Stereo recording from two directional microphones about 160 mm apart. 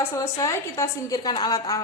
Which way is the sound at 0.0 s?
20° left (ahead or behind).